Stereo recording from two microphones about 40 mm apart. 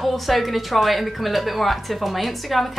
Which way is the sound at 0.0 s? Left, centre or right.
Centre.